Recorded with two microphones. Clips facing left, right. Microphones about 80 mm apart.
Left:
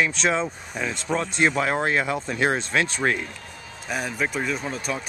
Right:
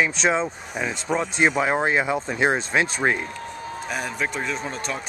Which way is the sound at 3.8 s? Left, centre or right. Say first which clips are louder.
Left 2 dB; centre.